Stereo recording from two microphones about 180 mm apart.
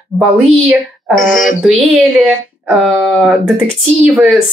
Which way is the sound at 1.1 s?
45° left (ahead or behind).